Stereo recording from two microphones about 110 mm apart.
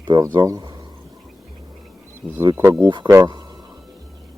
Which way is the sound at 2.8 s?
45° right (ahead or behind).